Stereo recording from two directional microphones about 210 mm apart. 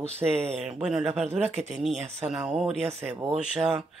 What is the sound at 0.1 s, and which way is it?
Speech, 30° right (ahead or behind).